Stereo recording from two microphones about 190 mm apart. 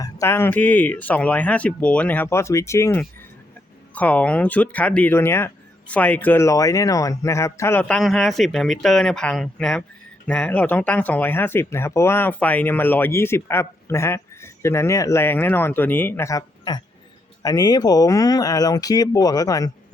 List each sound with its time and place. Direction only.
0.0 s speech: 15° left (ahead or behind)